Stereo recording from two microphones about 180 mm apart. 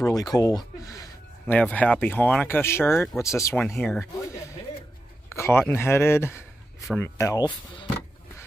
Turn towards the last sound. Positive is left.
turn(degrees=25)  # may be behind; listen again after turning